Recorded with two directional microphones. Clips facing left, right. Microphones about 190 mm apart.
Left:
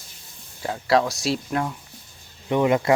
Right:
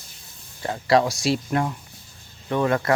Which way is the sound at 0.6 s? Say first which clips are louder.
Right 1 dB; centre (ahead or behind).